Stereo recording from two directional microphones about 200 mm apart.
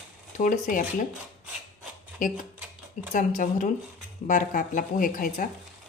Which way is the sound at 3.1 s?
40° left (ahead or behind).